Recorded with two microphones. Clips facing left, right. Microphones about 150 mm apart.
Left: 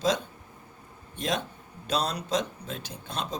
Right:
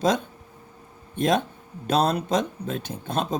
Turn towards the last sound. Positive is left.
turn(degrees=-50)  # may be behind; listen again after turning